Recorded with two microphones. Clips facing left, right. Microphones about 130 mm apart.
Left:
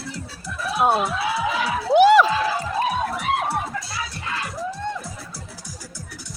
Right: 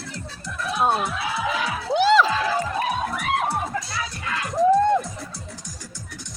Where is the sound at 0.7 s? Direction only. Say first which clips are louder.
Left 2 dB; 5° left (ahead or behind).